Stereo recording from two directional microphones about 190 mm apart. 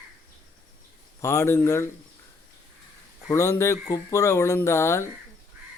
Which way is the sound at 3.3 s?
15° left (ahead or behind).